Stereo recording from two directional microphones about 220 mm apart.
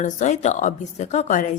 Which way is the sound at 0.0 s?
35° left (ahead or behind).